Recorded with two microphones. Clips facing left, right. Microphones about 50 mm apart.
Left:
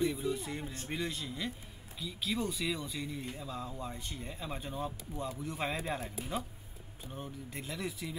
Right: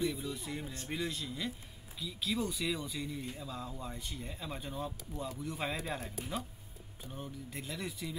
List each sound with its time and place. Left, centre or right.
0.0 s speech: centre